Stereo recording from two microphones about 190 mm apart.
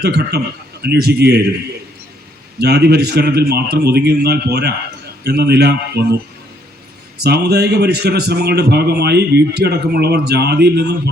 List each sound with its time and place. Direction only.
0.0 s a man's voice: 60° right (ahead or behind)
2.6 s a man's voice: 55° right (ahead or behind)
7.2 s a man's voice: 60° right (ahead or behind)